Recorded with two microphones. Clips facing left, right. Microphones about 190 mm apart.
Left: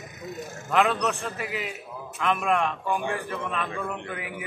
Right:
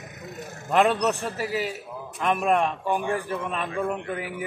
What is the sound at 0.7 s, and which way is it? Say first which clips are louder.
A man's voice: right 3 dB; 35° right (ahead or behind).